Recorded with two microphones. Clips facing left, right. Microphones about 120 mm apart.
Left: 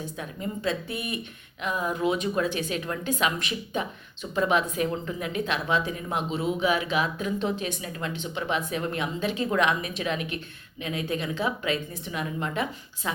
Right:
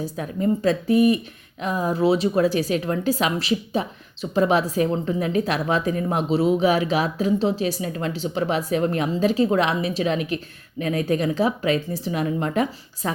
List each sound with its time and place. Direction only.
0.0 s a woman's voice: 40° right (ahead or behind)